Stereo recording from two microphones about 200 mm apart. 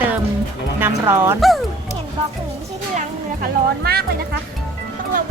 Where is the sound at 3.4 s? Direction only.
50° right (ahead or behind).